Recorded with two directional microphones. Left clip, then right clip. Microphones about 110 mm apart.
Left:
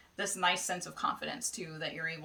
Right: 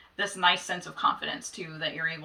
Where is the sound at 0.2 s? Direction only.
35° left (ahead or behind).